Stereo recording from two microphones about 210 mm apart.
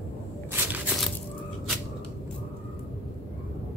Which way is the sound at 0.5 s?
5° right (ahead or behind).